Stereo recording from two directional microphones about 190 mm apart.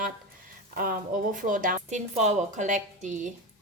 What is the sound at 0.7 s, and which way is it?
A woman's voice, 50° right (ahead or behind).